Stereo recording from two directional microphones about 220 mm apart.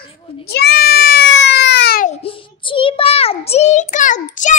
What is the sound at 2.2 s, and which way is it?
Child singing, 25° left (ahead or behind).